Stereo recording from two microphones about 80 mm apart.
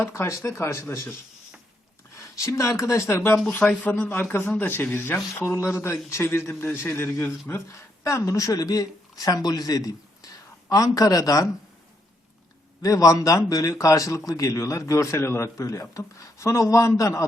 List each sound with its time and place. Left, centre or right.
0.0 s a man's voice: left
2.1 s speech: left
3.5 s a man's voice: left
12.8 s a man's voice: left